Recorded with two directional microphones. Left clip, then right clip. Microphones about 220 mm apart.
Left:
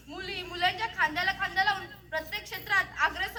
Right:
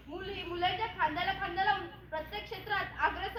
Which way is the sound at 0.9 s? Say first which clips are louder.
Left 4 dB; 15° left (ahead or behind).